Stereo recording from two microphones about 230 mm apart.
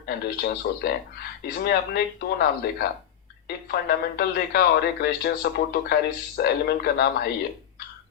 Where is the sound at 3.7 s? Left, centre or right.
Left.